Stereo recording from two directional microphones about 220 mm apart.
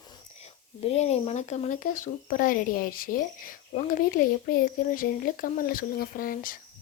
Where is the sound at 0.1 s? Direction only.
30° left (ahead or behind).